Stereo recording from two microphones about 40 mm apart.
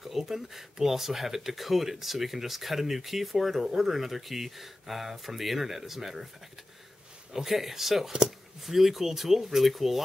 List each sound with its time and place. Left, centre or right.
0.0 s speech: centre
7.3 s speech: centre
8.1 s speech: centre
8.6 s speech: centre